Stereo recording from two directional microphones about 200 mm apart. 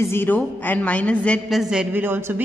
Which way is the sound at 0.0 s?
10° left (ahead or behind).